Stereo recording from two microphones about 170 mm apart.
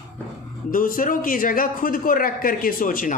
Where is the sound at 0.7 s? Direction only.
55° left (ahead or behind).